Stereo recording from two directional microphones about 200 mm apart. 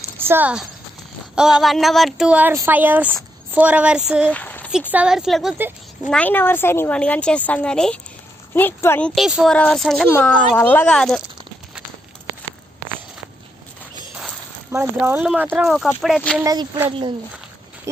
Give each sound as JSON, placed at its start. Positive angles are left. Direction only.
{"t": 0.2, "sound": "a child's voice", "side_deg": -10}
{"t": 4.3, "sound": "a sound", "side_deg": 10}
{"t": 4.9, "sound": "a child's voice", "side_deg": -5}
{"t": 6.1, "sound": "a woman's voice", "side_deg": 5}
{"t": 14.7, "sound": "a child's voice", "side_deg": -15}
{"t": 16.4, "sound": "speech", "side_deg": -15}